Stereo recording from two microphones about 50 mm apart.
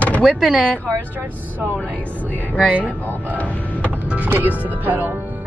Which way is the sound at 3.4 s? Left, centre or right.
Left.